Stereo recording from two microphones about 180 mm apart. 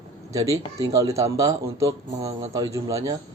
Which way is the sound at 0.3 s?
15° right (ahead or behind).